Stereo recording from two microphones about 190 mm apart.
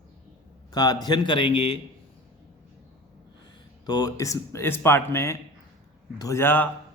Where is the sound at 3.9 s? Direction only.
20° left (ahead or behind).